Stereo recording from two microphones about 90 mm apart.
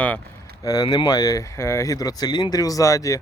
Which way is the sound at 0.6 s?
50° left (ahead or behind).